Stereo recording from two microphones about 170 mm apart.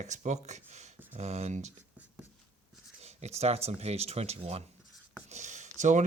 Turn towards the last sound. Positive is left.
turn(degrees=-45)  # may be behind; listen again after turning